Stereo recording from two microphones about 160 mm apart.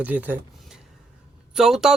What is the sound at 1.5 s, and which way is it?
Speech, 5° right (ahead or behind).